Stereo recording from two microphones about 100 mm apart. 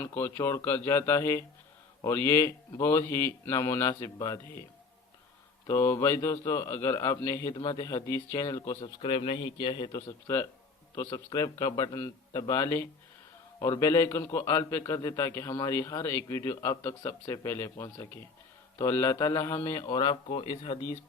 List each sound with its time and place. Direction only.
0.0 s speech: 20° left (ahead or behind)
5.6 s a man's voice: 25° left (ahead or behind)
8.8 s a man's voice: 70° left (ahead or behind); by 10.0 s 50° left (ahead or behind)
10.9 s a man's voice: 35° left (ahead or behind)
17.8 s a man's voice: 40° left (ahead or behind)
18.8 s a man's voice: 30° left (ahead or behind)
19.8 s speech: 50° left (ahead or behind)
20.2 s a man's voice: 70° left (ahead or behind)